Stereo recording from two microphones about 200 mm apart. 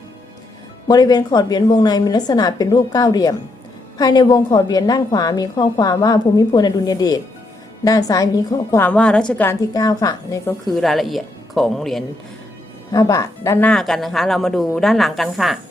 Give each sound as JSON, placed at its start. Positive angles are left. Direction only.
{"t": 0.9, "sound": "a woman's voice", "side_deg": 20}
{"t": 10.7, "sound": "a woman's voice", "side_deg": 0}
{"t": 12.9, "sound": "a woman's voice", "side_deg": 15}